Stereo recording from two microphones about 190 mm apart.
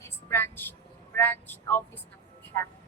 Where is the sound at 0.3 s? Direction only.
10° left (ahead or behind).